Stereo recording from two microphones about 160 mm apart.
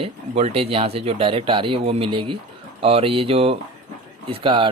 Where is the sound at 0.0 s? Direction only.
40° right (ahead or behind).